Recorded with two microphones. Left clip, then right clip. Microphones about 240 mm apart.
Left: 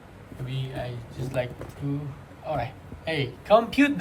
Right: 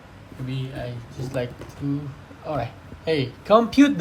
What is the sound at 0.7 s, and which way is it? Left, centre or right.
Speech, centre.